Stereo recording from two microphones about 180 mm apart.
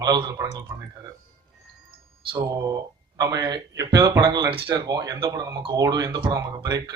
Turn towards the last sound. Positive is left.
turn(degrees=-20)  # may be behind; listen again after turning